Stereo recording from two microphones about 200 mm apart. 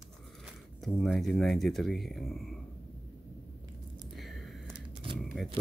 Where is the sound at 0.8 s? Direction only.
Centre (ahead or behind).